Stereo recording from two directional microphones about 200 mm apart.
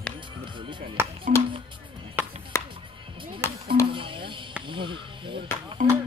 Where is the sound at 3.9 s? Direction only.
25° right (ahead or behind).